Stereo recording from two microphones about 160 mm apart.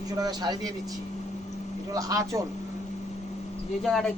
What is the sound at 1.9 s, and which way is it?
Speech, 20° right (ahead or behind).